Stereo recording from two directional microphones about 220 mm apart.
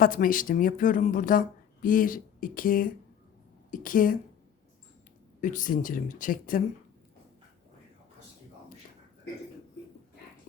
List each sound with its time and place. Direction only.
0.0 s a woman's voice: 40° left (ahead or behind)
5.4 s speech: 35° left (ahead or behind)